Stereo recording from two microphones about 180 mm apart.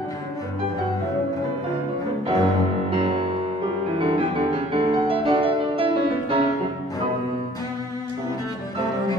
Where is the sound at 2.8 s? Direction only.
35° right (ahead or behind).